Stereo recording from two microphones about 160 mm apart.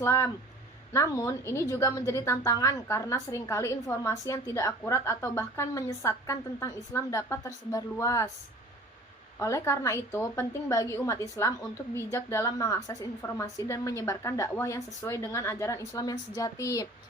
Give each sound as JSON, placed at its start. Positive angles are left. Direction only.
{"t": 0.0, "sound": "a woman's voice", "side_deg": 15}
{"t": 9.4, "sound": "a woman's voice", "side_deg": 20}